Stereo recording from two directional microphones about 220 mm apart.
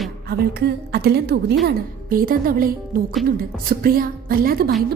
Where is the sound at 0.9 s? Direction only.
45° right (ahead or behind).